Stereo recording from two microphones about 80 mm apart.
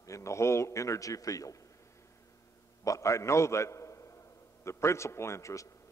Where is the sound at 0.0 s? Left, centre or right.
Left.